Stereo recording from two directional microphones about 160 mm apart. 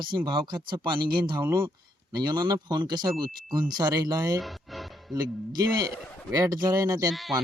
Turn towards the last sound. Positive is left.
turn(degrees=0)  # may be behind; listen again after turning